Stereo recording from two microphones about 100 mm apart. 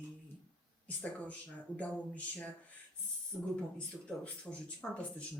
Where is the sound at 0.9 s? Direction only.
15° left (ahead or behind).